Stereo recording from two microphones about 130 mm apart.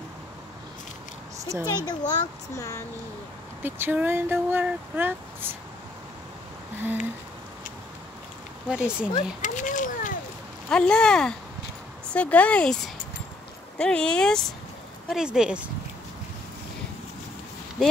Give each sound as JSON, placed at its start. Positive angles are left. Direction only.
{"t": 1.4, "sound": "speech", "side_deg": -20}
{"t": 1.9, "sound": "a child's voice", "side_deg": 30}
{"t": 3.6, "sound": "speech", "side_deg": -15}
{"t": 8.6, "sound": "speech", "side_deg": -5}
{"t": 9.4, "sound": "a sound", "side_deg": 75}
{"t": 10.7, "sound": "speech", "side_deg": 5}